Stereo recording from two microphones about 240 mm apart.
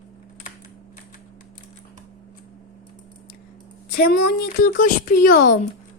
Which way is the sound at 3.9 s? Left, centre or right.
Left.